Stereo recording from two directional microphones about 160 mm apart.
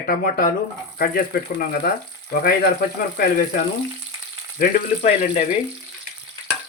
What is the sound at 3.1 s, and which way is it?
Speech, 65° left (ahead or behind).